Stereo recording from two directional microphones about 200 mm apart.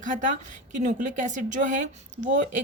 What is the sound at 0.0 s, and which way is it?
A woman's voice, 40° right (ahead or behind).